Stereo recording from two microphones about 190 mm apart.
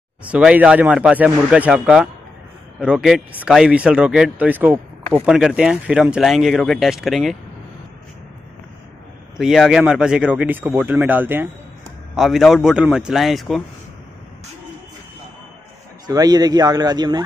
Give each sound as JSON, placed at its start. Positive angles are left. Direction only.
{"t": 0.3, "sound": "speech", "side_deg": -5}
{"t": 9.4, "sound": "speech", "side_deg": -5}
{"t": 16.1, "sound": "a man's voice", "side_deg": -20}